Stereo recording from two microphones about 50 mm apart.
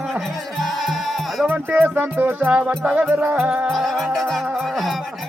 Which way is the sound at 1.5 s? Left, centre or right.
Right.